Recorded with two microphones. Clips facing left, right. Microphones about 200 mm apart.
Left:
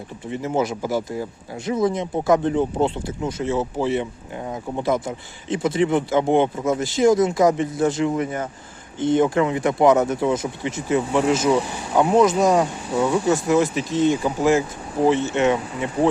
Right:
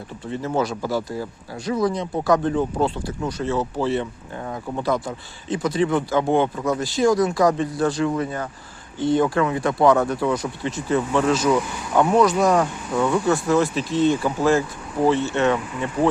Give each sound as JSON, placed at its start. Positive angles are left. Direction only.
{"t": 0.3, "sound": "speech", "side_deg": 20}